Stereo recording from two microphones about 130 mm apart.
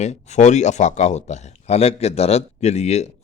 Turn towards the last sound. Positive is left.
turn(degrees=55)  # may be behind; listen again after turning